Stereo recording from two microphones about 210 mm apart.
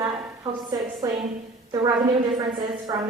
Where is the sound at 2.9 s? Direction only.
15° right (ahead or behind).